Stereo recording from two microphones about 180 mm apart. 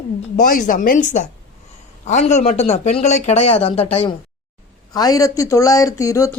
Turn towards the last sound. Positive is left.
turn(degrees=20)  # may be behind; listen again after turning